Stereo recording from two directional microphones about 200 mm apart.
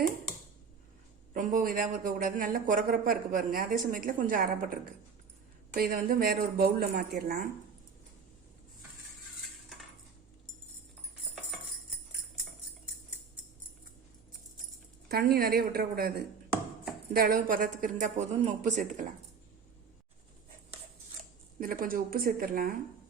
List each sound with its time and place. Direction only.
1.3 s a sound: 40° right (ahead or behind)
2.0 s speech: 45° right (ahead or behind)
15.1 s a woman's voice: 50° right (ahead or behind)
21.6 s speech: 45° right (ahead or behind)